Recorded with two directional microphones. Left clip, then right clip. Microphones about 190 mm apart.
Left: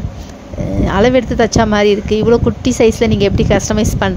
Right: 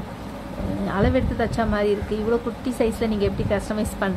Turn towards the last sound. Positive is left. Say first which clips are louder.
# left 10 dB
turn(degrees=45)  # may be behind; listen again after turning